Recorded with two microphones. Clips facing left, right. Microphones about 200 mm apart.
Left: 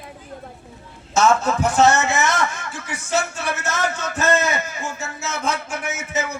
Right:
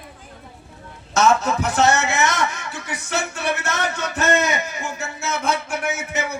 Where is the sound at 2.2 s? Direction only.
15° right (ahead or behind).